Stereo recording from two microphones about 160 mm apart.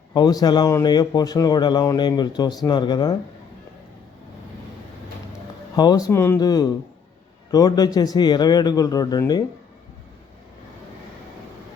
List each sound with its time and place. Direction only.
0.1 s speech: 25° left (ahead or behind)
5.7 s speech: 25° left (ahead or behind)